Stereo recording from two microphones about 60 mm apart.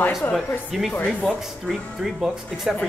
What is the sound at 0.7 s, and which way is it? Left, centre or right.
Speech, centre.